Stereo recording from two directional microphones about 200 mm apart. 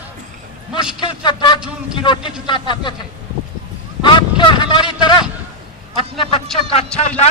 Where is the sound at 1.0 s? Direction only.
25° left (ahead or behind).